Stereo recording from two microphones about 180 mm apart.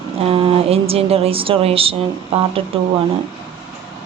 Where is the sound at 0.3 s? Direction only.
30° right (ahead or behind).